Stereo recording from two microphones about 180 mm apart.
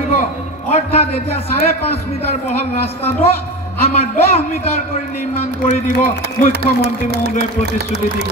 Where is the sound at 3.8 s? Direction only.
35° left (ahead or behind).